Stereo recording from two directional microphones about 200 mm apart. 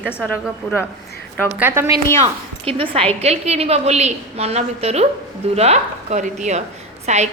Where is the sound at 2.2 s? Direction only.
30° right (ahead or behind).